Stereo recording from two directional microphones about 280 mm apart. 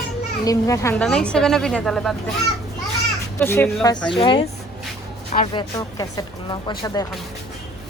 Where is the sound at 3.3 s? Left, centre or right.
Centre.